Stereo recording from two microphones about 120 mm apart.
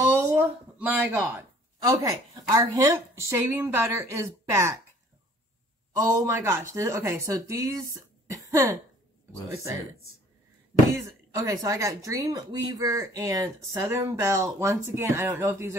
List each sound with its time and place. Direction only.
0.1 s a sound: 15° right (ahead or behind)
1.3 s speech: 30° right (ahead or behind)
6.1 s speech: 20° right (ahead or behind)
11.1 s speech: 30° right (ahead or behind)